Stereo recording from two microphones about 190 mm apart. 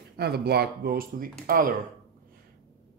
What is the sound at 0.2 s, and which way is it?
Speech, 55° right (ahead or behind).